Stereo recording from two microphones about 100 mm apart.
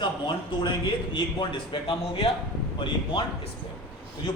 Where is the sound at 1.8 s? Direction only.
70° left (ahead or behind).